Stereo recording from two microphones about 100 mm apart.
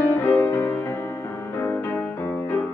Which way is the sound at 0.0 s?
20° left (ahead or behind).